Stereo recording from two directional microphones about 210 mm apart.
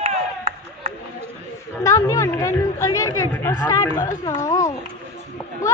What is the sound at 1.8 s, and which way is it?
Speech, 15° left (ahead or behind).